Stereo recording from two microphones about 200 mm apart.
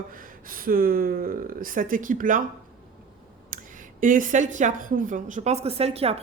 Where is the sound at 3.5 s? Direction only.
40° right (ahead or behind).